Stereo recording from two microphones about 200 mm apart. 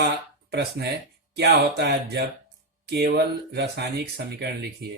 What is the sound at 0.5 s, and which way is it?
Speech, 55° right (ahead or behind).